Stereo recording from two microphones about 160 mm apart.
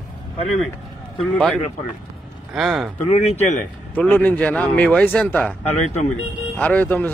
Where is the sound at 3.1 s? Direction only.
45° left (ahead or behind).